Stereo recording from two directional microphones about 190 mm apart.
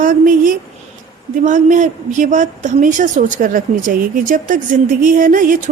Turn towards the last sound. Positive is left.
turn(degrees=-45)  # may be behind; listen again after turning